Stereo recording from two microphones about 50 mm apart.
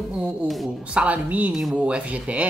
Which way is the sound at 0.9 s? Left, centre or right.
Right.